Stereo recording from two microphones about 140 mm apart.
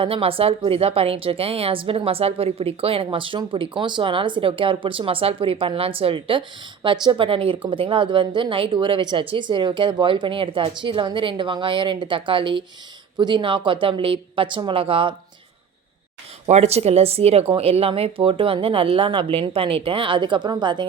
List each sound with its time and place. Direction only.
0.0 s a woman's voice: 40° right (ahead or behind)
16.5 s a woman's voice: 50° right (ahead or behind); by 20.8 s 35° right (ahead or behind)